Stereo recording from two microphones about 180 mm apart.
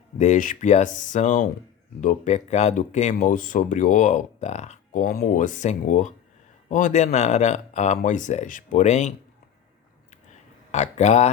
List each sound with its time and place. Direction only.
0.2 s speech: 45° left (ahead or behind)
10.7 s speech: 40° left (ahead or behind)